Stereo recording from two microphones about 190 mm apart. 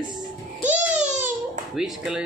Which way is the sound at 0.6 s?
5° right (ahead or behind).